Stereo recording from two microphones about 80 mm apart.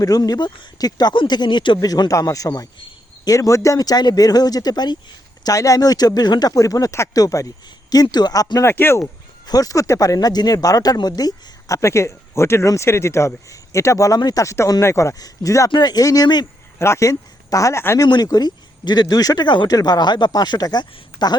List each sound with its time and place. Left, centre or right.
0.0 s speech: left
5.4 s speech: left
8.0 s speech: left
8.6 s speech: left
9.5 s speech: left
15.7 s speech: left
16.7 s speech: left
18.0 s speech: left
19.7 s speech: left